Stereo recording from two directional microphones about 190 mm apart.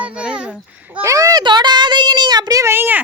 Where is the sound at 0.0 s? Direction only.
5° right (ahead or behind).